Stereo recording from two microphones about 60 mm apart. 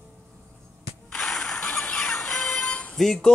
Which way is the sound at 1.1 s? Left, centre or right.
Centre.